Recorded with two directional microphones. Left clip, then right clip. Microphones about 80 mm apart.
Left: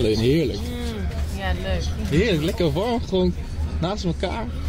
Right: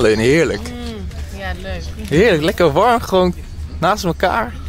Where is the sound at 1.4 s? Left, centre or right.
Centre.